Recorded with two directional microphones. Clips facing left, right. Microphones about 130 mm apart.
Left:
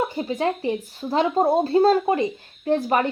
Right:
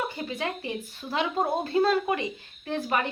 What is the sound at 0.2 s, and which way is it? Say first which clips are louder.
A woman's voice: left 8 dB; 35° left (ahead or behind).